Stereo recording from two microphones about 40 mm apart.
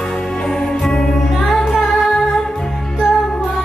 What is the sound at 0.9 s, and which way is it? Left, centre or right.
Music, centre.